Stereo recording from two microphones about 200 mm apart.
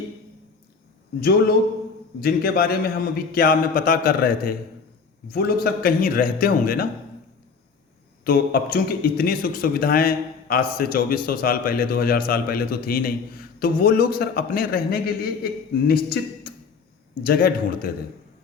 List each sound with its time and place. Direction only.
2.2 s a man's voice: 50° left (ahead or behind)
8.2 s a man's voice: 50° left (ahead or behind)